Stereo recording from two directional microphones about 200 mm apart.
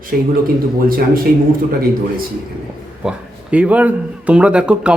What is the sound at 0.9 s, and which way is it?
Speech, 45° right (ahead or behind).